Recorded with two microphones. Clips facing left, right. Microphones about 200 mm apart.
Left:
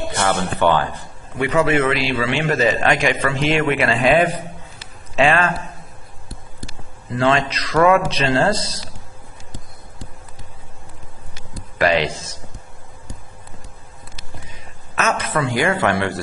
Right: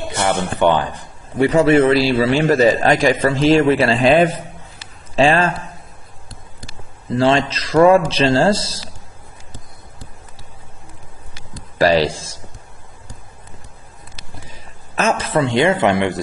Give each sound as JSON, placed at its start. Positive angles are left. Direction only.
{"t": 0.2, "sound": "speech", "side_deg": -15}
{"t": 1.4, "sound": "a man's voice", "side_deg": -35}
{"t": 7.2, "sound": "a man's voice", "side_deg": -30}
{"t": 11.8, "sound": "a man's voice", "side_deg": -35}
{"t": 15.0, "sound": "a man's voice", "side_deg": -30}